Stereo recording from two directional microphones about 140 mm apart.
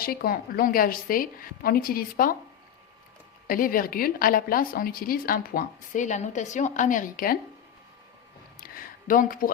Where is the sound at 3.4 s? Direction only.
90° left.